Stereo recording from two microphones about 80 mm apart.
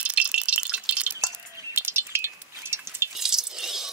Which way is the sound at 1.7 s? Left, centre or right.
Right.